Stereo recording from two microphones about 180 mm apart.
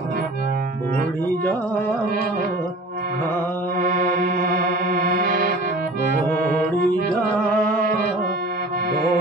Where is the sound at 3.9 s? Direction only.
50° right (ahead or behind).